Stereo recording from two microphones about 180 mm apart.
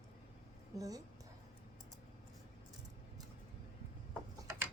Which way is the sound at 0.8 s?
20° right (ahead or behind).